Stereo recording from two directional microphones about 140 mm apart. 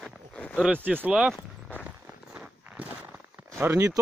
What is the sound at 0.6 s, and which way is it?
Speech, 10° right (ahead or behind).